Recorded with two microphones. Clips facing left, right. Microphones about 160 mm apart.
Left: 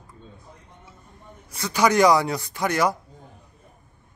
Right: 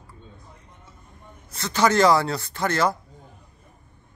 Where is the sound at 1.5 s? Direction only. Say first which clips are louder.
Even; 10° left (ahead or behind).